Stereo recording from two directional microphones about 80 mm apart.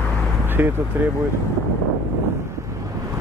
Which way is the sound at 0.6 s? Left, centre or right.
Right.